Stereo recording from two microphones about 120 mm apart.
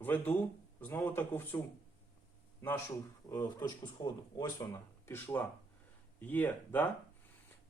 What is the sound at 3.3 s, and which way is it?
Speech, 30° left (ahead or behind).